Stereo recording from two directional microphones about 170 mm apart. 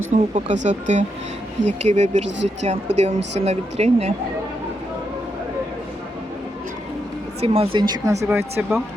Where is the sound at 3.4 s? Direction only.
35° right (ahead or behind).